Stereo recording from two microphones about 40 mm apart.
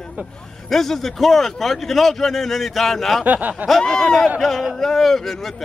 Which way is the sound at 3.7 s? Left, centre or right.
Centre.